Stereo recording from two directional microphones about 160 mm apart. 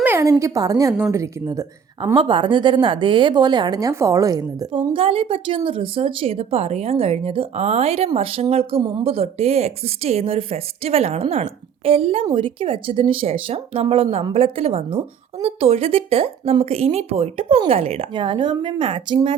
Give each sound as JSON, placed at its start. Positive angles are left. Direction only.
{"t": 0.0, "sound": "a woman's voice", "side_deg": -15}